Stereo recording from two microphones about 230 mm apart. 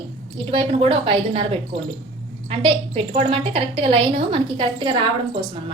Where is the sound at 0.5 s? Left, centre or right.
Right.